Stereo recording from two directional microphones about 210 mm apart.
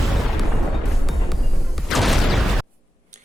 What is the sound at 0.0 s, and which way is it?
Music, centre (ahead or behind).